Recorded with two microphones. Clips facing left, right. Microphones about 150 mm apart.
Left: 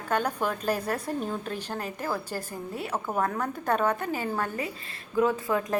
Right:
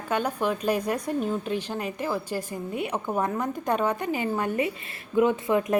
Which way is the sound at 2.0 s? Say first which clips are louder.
Right 3 dB; 15° right (ahead or behind).